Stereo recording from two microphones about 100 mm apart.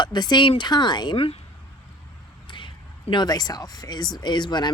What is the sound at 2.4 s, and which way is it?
Speech, 55° left (ahead or behind).